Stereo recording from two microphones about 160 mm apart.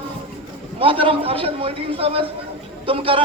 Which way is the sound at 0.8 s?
35° right (ahead or behind).